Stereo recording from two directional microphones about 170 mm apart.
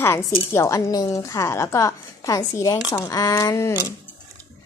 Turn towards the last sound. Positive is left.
turn(degrees=15)  # may be behind; listen again after turning